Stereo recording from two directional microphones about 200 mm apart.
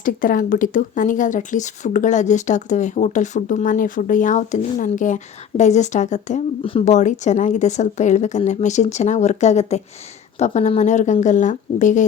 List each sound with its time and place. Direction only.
0.0 s speech: 45° left (ahead or behind)